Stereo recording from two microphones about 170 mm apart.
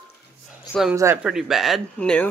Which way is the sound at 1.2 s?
5° right (ahead or behind).